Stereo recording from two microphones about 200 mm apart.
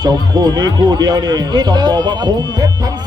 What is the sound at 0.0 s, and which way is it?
Speech, 20° right (ahead or behind).